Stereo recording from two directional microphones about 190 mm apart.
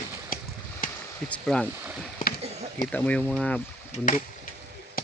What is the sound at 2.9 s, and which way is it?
Speech, 10° left (ahead or behind).